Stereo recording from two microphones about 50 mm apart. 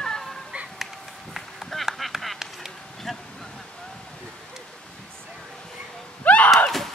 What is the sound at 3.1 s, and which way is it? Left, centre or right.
Insect, centre.